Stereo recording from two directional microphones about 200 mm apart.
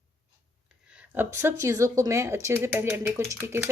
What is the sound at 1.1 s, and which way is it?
Speech, 10° right (ahead or behind).